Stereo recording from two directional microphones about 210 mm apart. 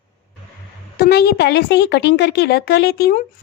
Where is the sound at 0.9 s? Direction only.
50° left (ahead or behind).